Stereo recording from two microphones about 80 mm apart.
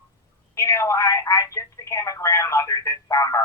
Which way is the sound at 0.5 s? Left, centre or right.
Left.